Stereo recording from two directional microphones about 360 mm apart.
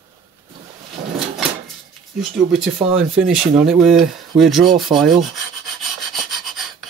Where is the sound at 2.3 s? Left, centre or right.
Centre.